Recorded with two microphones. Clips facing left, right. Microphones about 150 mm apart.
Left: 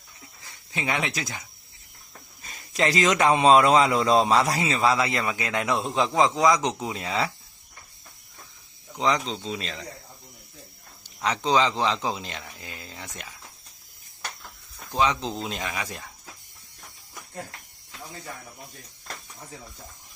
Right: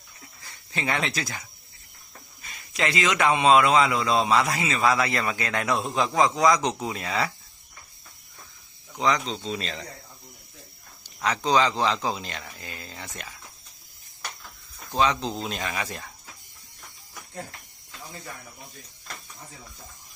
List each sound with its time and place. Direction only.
0.4 s speech: 15° left (ahead or behind)
2.4 s a man's voice: 35° left (ahead or behind); by 7.3 s 20° left (ahead or behind)
9.0 s a man's voice: 30° left (ahead or behind)
9.4 s speech: 15° left (ahead or behind)
11.0 s speech: 25° left (ahead or behind)
14.9 s speech: 15° left (ahead or behind)